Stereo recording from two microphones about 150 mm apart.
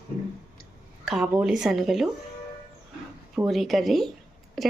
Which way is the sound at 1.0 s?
5° right (ahead or behind).